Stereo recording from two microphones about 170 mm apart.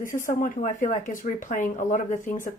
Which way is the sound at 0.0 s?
50° left (ahead or behind).